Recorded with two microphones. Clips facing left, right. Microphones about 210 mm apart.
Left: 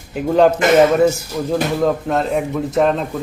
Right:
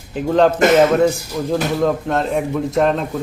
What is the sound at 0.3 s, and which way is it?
Speech, 10° left (ahead or behind).